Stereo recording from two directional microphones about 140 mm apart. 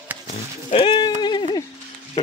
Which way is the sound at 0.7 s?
35° left (ahead or behind).